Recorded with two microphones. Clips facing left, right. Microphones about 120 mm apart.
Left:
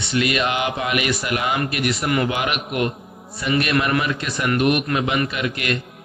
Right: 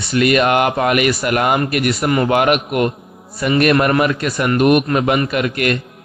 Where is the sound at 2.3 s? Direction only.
55° right (ahead or behind).